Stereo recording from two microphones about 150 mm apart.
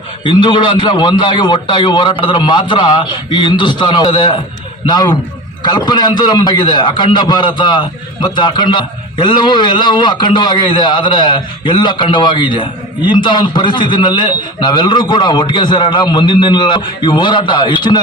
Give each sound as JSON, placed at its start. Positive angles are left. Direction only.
{"t": 0.3, "sound": "a man's voice", "side_deg": 30}